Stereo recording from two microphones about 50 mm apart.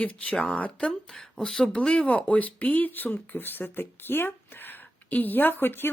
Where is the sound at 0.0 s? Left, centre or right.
Left.